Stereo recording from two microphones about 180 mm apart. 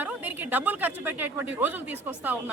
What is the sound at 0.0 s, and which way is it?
Speech, 10° right (ahead or behind).